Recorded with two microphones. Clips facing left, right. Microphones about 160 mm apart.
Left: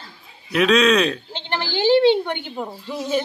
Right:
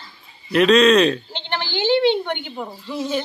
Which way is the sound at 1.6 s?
35° left (ahead or behind).